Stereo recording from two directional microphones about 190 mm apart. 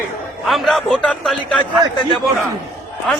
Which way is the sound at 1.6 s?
25° left (ahead or behind).